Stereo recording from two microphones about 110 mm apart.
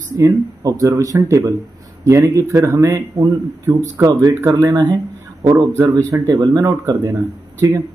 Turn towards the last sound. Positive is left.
turn(degrees=-35)  # may be behind; listen again after turning